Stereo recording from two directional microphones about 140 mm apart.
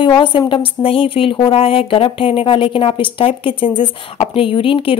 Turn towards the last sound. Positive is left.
turn(degrees=40)  # may be behind; listen again after turning